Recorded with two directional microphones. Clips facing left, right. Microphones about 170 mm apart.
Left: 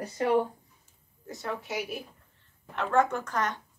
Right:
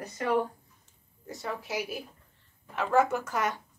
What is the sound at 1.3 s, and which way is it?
A woman's voice, centre (ahead or behind).